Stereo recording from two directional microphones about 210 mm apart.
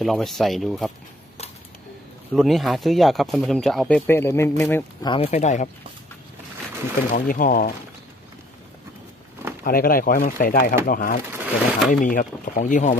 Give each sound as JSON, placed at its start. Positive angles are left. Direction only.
{"t": 0.0, "sound": "speech", "side_deg": 0}
{"t": 2.3, "sound": "speech", "side_deg": 0}
{"t": 5.1, "sound": "speech", "side_deg": 30}
{"t": 7.2, "sound": "speech", "side_deg": 40}
{"t": 9.7, "sound": "speech", "side_deg": 45}
{"t": 11.3, "sound": "speech", "side_deg": -10}
{"t": 11.9, "sound": "speech", "side_deg": 40}